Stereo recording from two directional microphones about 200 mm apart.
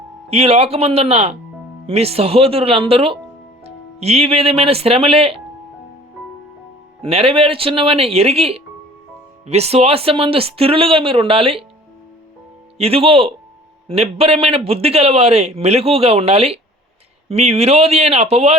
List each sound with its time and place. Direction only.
0.3 s a man's voice: 30° right (ahead or behind)
7.0 s a man's voice: 30° right (ahead or behind)
12.7 s a man's voice: 30° right (ahead or behind)